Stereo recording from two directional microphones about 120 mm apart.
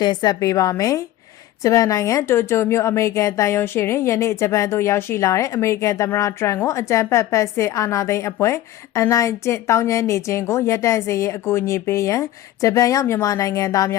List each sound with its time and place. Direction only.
0.0 s a woman's voice: 35° left (ahead or behind)